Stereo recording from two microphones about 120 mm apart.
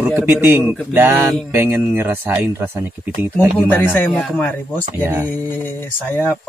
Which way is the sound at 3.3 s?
15° left (ahead or behind).